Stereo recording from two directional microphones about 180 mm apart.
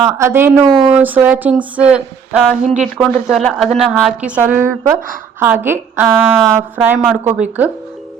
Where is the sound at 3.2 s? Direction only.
Centre (ahead or behind).